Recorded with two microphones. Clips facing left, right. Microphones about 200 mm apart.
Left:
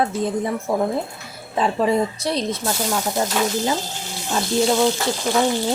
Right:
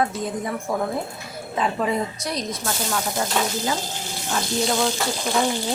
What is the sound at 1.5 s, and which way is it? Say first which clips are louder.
Speech: left 4 dB; 30° left (ahead or behind).